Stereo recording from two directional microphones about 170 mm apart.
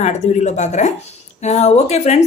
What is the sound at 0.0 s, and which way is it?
A woman's voice, 45° left (ahead or behind).